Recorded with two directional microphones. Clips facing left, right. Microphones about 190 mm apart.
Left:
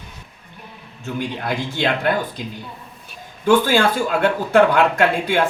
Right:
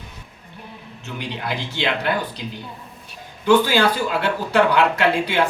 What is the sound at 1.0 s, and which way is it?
Speech, 50° left (ahead or behind).